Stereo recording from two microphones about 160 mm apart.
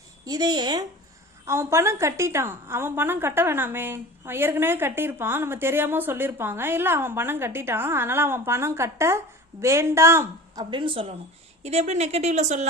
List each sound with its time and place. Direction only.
0.3 s a woman's voice: 25° right (ahead or behind); by 12.6 s 45° right (ahead or behind)